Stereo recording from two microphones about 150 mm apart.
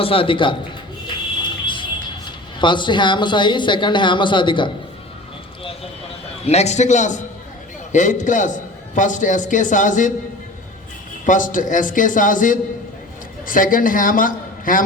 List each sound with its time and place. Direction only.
0.0 s speech: 35° left (ahead or behind)
1.6 s music: 35° left (ahead or behind)
2.6 s speech: 30° left (ahead or behind)
6.4 s a man's voice: 45° left (ahead or behind)
11.3 s a man's voice: 60° left (ahead or behind)